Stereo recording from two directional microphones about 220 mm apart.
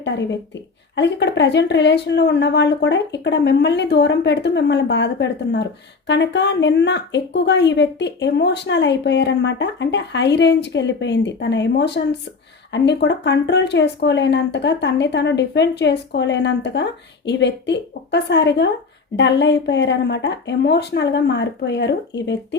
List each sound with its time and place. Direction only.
0.0 s a woman's voice: 55° left (ahead or behind)